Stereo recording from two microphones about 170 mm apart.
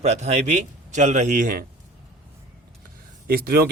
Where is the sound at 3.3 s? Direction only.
65° right (ahead or behind).